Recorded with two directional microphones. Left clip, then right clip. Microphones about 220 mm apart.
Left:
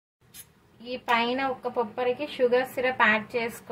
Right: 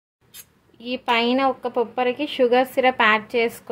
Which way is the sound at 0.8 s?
40° right (ahead or behind).